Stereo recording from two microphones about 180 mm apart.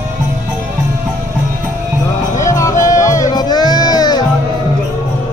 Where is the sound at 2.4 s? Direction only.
15° left (ahead or behind).